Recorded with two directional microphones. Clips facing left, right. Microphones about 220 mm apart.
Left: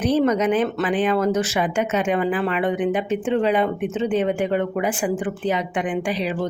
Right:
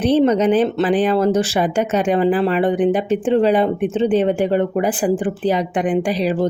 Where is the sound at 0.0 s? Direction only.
30° right (ahead or behind).